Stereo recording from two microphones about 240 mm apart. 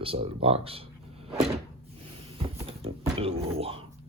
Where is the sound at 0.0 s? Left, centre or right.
Right.